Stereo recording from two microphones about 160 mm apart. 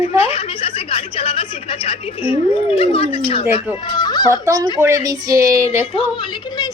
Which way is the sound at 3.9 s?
25° left (ahead or behind).